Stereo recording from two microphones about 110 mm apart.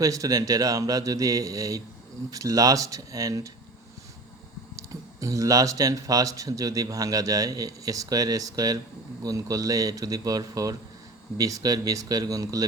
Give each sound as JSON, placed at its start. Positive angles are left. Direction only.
{"t": 0.0, "sound": "speech", "side_deg": -30}
{"t": 4.8, "sound": "speech", "side_deg": -30}